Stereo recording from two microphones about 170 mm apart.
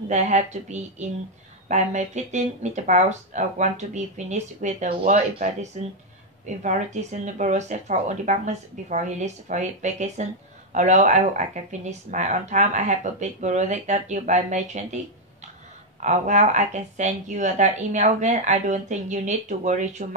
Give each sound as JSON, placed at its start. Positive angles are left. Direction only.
{"t": 0.1, "sound": "speech", "side_deg": -40}
{"t": 16.0, "sound": "speech", "side_deg": -45}